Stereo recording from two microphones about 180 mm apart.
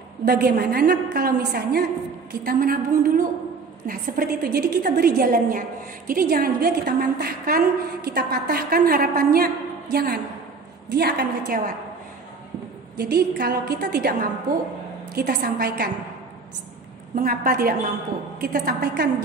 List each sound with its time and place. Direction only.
0.2 s a woman's voice: 60° right (ahead or behind)
12.9 s a woman's voice: 60° right (ahead or behind)
15.1 s a woman's voice: 55° right (ahead or behind)
17.1 s a woman's voice: 55° right (ahead or behind)